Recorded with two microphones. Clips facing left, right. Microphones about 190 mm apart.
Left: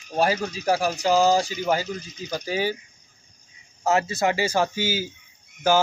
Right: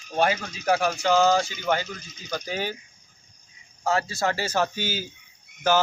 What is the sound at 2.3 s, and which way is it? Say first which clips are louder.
Speech: left 4 dB; 10° left (ahead or behind).